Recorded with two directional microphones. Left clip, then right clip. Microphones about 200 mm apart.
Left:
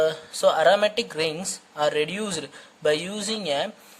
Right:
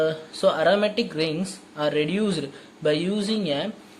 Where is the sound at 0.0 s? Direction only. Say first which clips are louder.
Left 1 dB; 40° left (ahead or behind).